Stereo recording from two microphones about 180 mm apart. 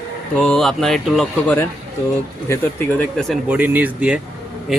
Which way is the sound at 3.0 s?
5° left (ahead or behind).